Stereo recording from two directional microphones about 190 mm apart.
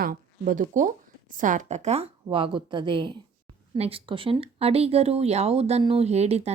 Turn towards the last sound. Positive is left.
turn(degrees=-35)  # may be behind; listen again after turning